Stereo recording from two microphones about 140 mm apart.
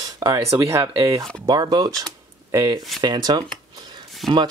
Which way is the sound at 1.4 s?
30° right (ahead or behind).